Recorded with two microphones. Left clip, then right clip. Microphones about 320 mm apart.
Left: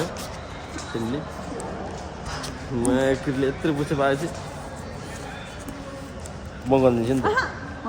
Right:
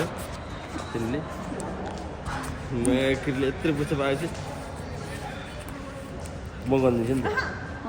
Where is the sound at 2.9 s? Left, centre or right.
Centre.